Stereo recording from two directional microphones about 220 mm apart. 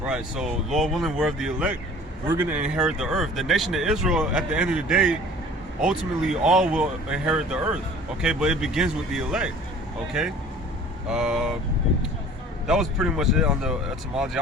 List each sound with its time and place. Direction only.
0.1 s speech: 5° right (ahead or behind)
11.1 s speech: 5° right (ahead or behind)
12.6 s speech: centre (ahead or behind)